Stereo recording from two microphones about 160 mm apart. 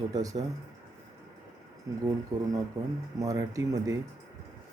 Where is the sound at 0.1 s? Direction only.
20° right (ahead or behind).